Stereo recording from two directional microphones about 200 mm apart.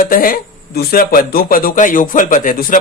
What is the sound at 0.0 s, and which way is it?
A man's voice, 45° left (ahead or behind).